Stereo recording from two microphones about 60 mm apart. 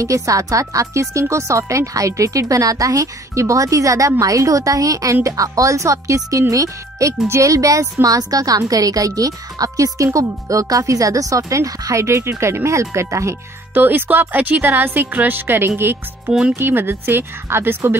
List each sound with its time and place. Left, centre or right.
0.0 s a woman's voice: right
13.7 s a woman's voice: right